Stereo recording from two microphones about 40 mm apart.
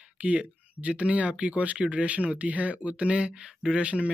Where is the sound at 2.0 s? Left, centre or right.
Right.